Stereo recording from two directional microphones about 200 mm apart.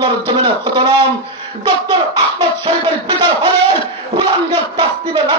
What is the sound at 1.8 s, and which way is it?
Speech, 25° right (ahead or behind).